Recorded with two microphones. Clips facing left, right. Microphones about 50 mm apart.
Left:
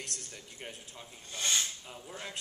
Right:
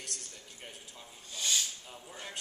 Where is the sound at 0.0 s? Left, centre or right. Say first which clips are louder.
Left 2 dB; left.